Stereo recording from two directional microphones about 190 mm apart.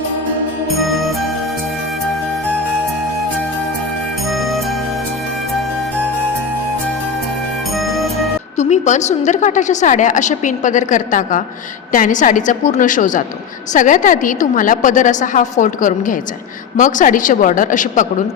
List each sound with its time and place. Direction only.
0.8 s music: centre (ahead or behind)
8.5 s a woman's voice: 40° left (ahead or behind)